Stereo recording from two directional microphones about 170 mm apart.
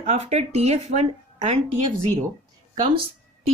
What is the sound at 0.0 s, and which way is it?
Speech, 40° right (ahead or behind).